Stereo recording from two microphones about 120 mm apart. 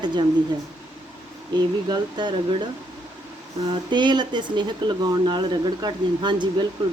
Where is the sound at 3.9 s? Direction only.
40° right (ahead or behind).